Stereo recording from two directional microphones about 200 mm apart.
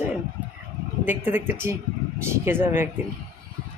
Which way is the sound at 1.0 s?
10° right (ahead or behind).